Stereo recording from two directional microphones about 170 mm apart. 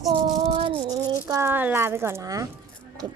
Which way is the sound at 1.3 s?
15° right (ahead or behind).